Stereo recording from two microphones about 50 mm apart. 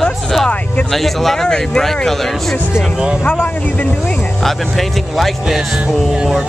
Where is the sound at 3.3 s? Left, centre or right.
Left.